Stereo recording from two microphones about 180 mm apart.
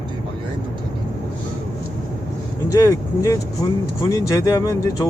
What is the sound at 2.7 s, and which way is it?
Speech, 20° left (ahead or behind).